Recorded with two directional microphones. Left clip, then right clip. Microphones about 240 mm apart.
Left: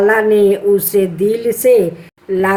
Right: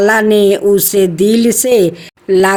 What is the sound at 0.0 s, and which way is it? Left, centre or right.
A woman's voice, right.